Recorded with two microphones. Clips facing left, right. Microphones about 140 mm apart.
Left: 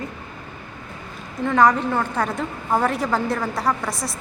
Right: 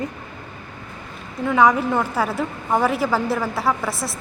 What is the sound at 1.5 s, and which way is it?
A woman's voice, 10° right (ahead or behind).